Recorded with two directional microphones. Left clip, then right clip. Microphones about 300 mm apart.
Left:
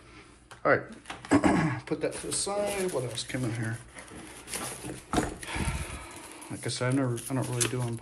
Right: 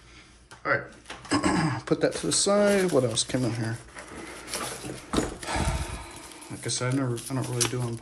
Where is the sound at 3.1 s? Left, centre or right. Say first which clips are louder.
Right 6 dB; centre.